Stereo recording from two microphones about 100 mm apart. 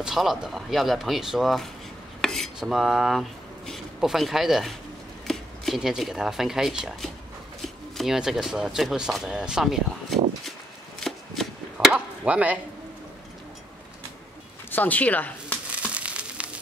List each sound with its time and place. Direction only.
0.0 s speech: 5° right (ahead or behind)
11.1 s chopping: centre (ahead or behind)
11.9 s chop: 15° right (ahead or behind)
14.7 s speech: 15° left (ahead or behind)
15.7 s frying: 10° right (ahead or behind)